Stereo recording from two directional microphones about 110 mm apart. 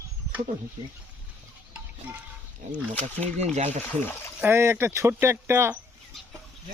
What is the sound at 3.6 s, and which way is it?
Speech, 90° right.